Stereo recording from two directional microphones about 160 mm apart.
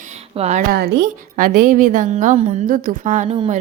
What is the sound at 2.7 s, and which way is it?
Speech, 55° right (ahead or behind).